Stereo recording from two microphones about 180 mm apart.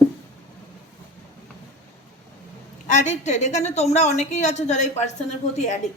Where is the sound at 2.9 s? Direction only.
40° left (ahead or behind).